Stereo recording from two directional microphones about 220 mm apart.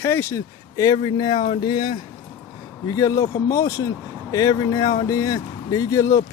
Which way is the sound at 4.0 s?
5° right (ahead or behind).